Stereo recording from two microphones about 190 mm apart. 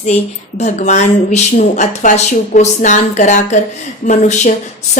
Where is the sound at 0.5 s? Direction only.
40° left (ahead or behind).